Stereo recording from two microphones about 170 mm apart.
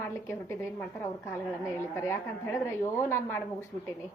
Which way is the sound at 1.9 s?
15° left (ahead or behind).